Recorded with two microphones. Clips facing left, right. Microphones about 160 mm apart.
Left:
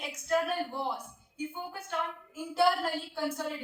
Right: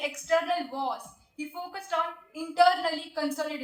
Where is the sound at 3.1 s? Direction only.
90° right.